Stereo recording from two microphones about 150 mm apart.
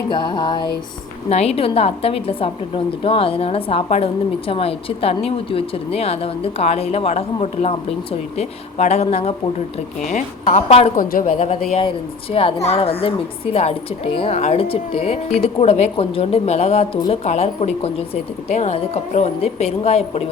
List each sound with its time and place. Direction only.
0.1 s a sound: 30° left (ahead or behind)
1.3 s a woman's voice: 45° left (ahead or behind)
10.9 s a woman's voice: 70° left (ahead or behind)
11.7 s a woman's voice: 40° left (ahead or behind)